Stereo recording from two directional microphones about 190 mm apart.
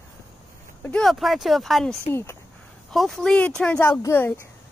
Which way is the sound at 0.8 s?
5° left (ahead or behind).